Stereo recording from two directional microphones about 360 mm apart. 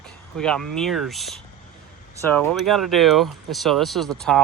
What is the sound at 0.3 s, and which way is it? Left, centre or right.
Speech, centre.